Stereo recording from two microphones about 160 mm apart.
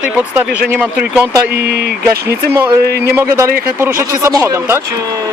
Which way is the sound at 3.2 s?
20° right (ahead or behind).